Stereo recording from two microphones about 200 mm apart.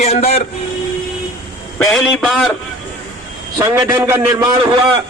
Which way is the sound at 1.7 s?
Centre (ahead or behind).